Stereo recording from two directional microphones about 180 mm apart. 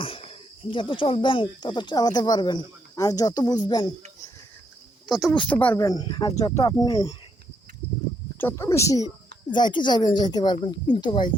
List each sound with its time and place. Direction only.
0.0 s speech: 30° left (ahead or behind)
5.0 s speech: centre (ahead or behind); by 7.2 s 20° left (ahead or behind)
8.4 s speech: 15° left (ahead or behind)